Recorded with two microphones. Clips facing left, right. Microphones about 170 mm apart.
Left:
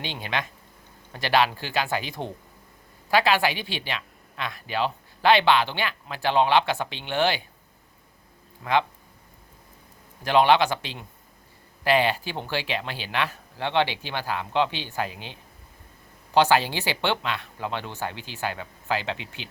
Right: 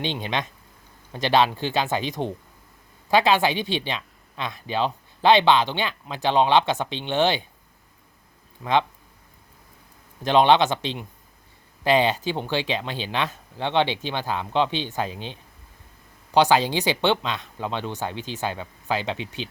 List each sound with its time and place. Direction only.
0.0 s speech: 20° right (ahead or behind)
8.6 s speech: 20° right (ahead or behind)
10.2 s speech: 20° right (ahead or behind)